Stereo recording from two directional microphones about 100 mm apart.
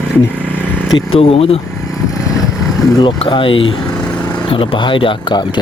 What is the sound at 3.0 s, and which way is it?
Speech, 55° left (ahead or behind).